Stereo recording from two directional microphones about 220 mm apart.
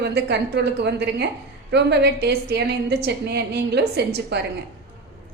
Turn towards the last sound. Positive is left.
turn(degrees=-50)  # may be behind; listen again after turning